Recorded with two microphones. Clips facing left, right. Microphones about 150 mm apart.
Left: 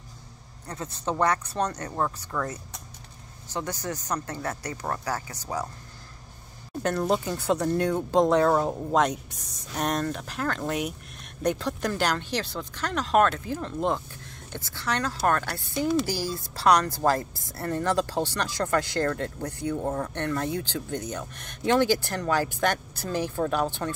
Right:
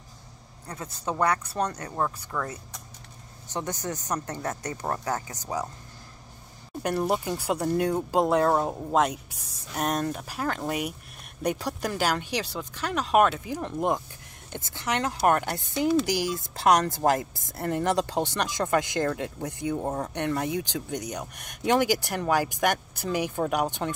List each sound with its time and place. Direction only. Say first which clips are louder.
1.0 s speech: left 1 dB; 10° right (ahead or behind)
3.4 s speech: even; 20° right (ahead or behind)
6.8 s speech: left 1 dB; 10° right (ahead or behind)